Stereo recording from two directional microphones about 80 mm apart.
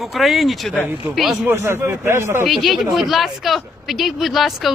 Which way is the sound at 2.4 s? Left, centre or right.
Centre.